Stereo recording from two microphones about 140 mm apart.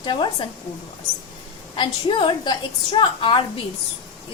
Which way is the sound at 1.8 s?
35° left (ahead or behind).